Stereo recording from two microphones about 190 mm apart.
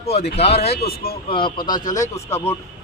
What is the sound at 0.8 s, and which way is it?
Speech, 55° left (ahead or behind).